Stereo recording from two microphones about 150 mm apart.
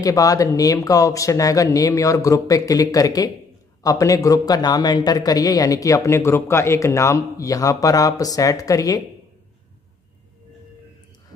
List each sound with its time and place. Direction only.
0.0 s a man's voice: 25° left (ahead or behind)